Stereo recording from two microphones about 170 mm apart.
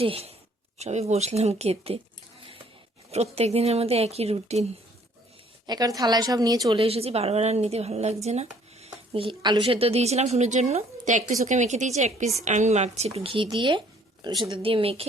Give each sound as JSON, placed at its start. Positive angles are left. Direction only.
{"t": 0.0, "sound": "a woman's voice", "side_deg": -35}
{"t": 3.1, "sound": "a woman's voice", "side_deg": -40}
{"t": 5.6, "sound": "a woman's voice", "side_deg": -25}